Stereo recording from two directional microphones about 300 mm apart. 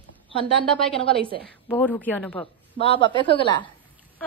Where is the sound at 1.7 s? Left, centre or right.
Centre.